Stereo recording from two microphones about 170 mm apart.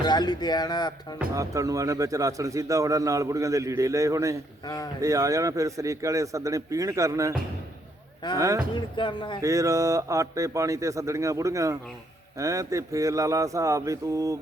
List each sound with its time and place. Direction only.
0.0 s speech: 25° left (ahead or behind)
1.4 s a man's voice: 20° right (ahead or behind)
4.6 s speech: 20° left (ahead or behind)
4.9 s a man's voice: 20° right (ahead or behind)
8.4 s a man's voice: 20° right (ahead or behind)
9.0 s speech: 30° left (ahead or behind)
9.4 s a man's voice: 20° right (ahead or behind)